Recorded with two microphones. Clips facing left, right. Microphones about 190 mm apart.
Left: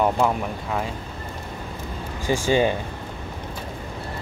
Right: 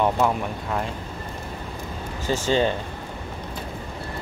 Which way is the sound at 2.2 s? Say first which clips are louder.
Left 2 dB; 10° left (ahead or behind).